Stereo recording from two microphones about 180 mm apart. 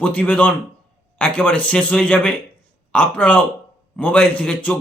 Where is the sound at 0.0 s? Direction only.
10° left (ahead or behind).